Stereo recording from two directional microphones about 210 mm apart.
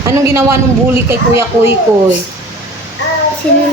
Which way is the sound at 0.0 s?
15° right (ahead or behind).